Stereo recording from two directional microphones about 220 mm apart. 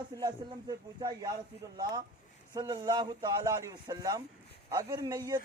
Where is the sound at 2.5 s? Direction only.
15° right (ahead or behind).